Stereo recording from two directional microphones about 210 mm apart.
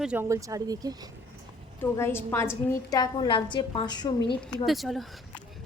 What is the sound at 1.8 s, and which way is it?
A woman's voice, 10° left (ahead or behind).